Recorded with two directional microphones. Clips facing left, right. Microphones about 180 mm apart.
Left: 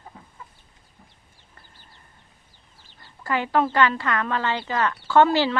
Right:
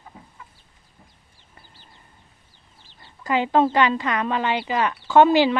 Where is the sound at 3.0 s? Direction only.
15° right (ahead or behind).